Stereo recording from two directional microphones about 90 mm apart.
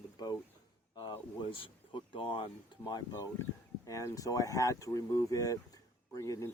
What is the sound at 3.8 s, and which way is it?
Speech, 35° left (ahead or behind).